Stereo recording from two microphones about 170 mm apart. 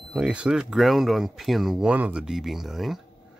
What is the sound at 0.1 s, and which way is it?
Speech, 5° right (ahead or behind).